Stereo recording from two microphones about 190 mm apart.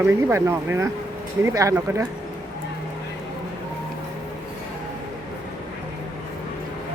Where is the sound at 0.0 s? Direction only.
10° right (ahead or behind).